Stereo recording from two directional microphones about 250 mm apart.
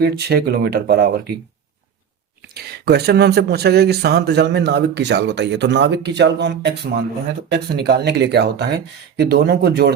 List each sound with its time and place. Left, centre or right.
0.0 s speech: right
2.6 s speech: right